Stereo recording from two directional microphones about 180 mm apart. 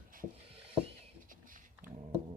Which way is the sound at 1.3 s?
50° right (ahead or behind).